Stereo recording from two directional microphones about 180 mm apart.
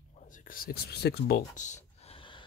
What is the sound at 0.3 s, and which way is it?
Speech, 50° left (ahead or behind).